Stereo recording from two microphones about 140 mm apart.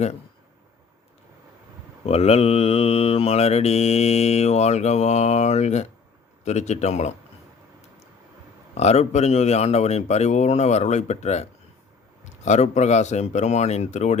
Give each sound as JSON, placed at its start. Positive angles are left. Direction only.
{"t": 2.0, "sound": "mantra", "side_deg": 45}
{"t": 6.4, "sound": "speech", "side_deg": 55}
{"t": 8.7, "sound": "mantra", "side_deg": 50}
{"t": 12.2, "sound": "speech", "side_deg": 60}